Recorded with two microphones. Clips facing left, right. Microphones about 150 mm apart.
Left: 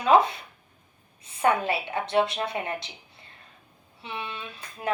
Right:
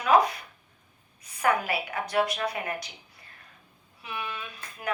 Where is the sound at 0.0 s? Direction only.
25° left (ahead or behind).